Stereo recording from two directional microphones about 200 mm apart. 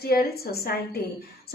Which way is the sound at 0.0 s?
50° left (ahead or behind).